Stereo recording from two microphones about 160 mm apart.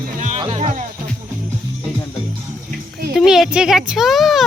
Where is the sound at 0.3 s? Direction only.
40° right (ahead or behind).